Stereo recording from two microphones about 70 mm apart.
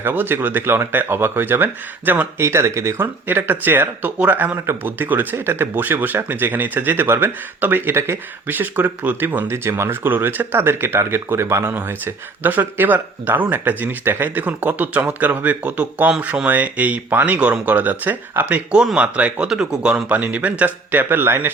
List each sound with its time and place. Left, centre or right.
0.0 s speech: right
2.4 s speech: right